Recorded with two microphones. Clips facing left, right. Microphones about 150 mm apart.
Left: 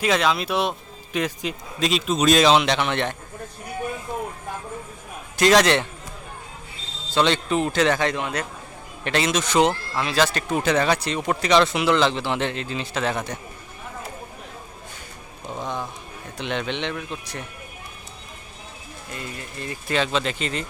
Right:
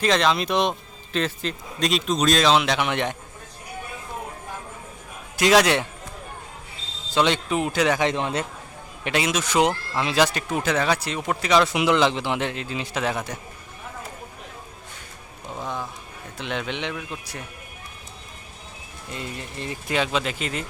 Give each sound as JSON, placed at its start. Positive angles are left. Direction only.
{"t": 0.0, "sound": "speech", "side_deg": 5}
{"t": 1.8, "sound": "speech", "side_deg": 0}
{"t": 5.4, "sound": "speech", "side_deg": -10}
{"t": 7.1, "sound": "speech", "side_deg": -10}
{"t": 8.1, "sound": "speech", "side_deg": -25}
{"t": 9.0, "sound": "speech", "side_deg": -10}
{"t": 10.5, "sound": "speech", "side_deg": -5}
{"t": 15.5, "sound": "a sound", "side_deg": -5}
{"t": 16.4, "sound": "speech", "side_deg": -5}
{"t": 19.1, "sound": "speech", "side_deg": -25}
{"t": 19.9, "sound": "speech", "side_deg": -10}